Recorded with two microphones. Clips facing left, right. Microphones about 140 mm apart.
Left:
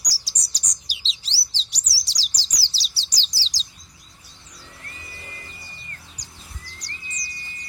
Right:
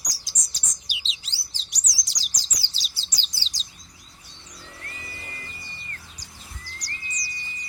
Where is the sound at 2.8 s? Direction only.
35° left (ahead or behind).